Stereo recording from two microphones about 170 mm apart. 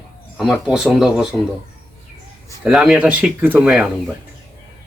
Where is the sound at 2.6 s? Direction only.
Centre (ahead or behind).